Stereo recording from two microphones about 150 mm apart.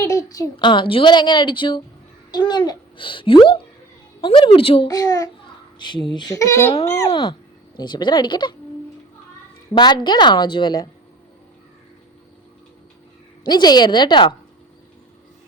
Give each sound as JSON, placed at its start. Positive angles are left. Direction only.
{"t": 0.0, "sound": "a woman's voice", "side_deg": 20}
{"t": 4.9, "sound": "a woman's voice", "side_deg": 25}
{"t": 9.7, "sound": "a woman's voice", "side_deg": 30}
{"t": 13.5, "sound": "a woman's voice", "side_deg": 25}